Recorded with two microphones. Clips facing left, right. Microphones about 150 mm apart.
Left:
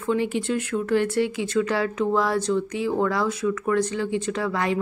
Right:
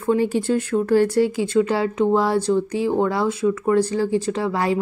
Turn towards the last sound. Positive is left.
turn(degrees=-30)  # may be behind; listen again after turning